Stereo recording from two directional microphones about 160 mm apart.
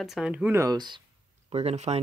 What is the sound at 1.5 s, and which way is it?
Speech, 40° right (ahead or behind).